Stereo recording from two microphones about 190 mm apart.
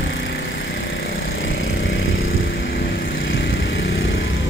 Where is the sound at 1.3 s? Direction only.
85° left.